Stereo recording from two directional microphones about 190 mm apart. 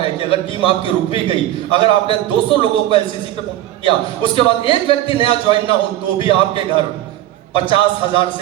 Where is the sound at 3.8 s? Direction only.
30° left (ahead or behind).